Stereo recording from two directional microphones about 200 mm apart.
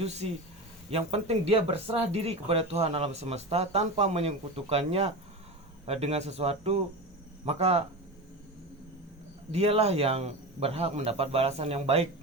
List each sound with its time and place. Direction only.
0.0 s speech: 35° right (ahead or behind)
9.5 s speech: 30° right (ahead or behind)